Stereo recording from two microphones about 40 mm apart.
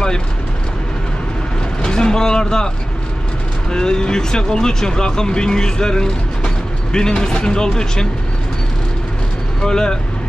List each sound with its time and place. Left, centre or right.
1.8 s vehicle: centre
3.7 s speech: centre
9.6 s speech: centre